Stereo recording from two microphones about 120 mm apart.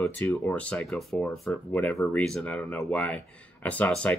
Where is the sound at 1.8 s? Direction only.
15° left (ahead or behind).